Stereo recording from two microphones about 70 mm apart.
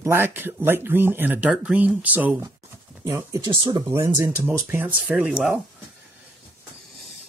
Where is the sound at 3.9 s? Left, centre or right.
Right.